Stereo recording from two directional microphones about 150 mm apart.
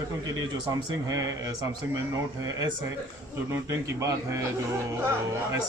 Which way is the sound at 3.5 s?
20° right (ahead or behind).